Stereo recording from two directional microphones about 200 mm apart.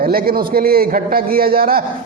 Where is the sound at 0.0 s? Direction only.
50° right (ahead or behind).